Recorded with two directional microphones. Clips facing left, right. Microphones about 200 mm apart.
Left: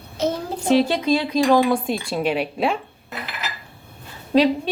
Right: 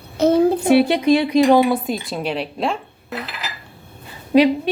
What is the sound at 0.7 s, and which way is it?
Speech, 10° right (ahead or behind).